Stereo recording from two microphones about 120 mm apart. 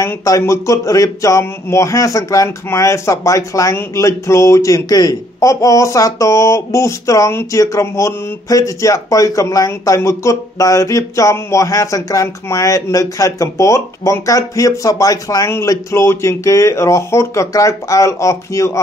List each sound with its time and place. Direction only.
0.0 s speech: 25° left (ahead or behind)